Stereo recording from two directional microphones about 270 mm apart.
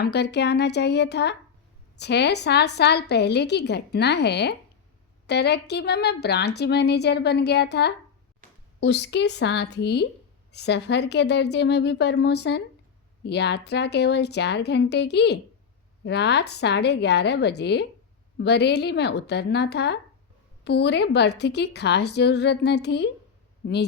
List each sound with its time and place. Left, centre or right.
0.0 s a woman's voice: left